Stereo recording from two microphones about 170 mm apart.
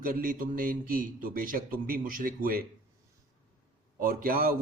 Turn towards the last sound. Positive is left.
turn(degrees=-55)  # may be behind; listen again after turning